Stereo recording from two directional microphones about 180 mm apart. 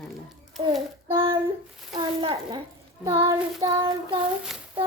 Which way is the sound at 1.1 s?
30° right (ahead or behind).